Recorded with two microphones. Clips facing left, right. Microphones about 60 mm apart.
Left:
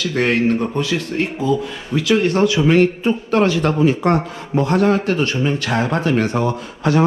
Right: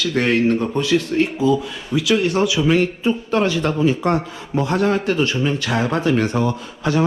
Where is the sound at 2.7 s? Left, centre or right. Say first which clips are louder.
Left 3 dB; left.